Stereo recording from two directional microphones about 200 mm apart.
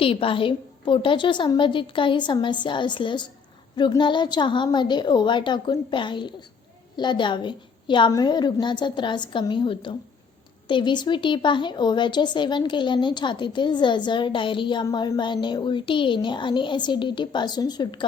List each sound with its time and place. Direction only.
0.0 s speech: 25° left (ahead or behind)